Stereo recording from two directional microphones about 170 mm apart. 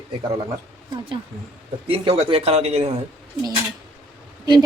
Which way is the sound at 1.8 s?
35° right (ahead or behind).